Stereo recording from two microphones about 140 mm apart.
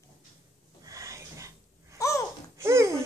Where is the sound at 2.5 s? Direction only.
20° right (ahead or behind).